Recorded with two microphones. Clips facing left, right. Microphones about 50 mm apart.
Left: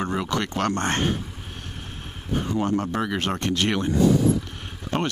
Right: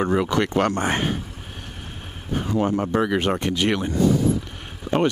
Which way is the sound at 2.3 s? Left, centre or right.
Centre.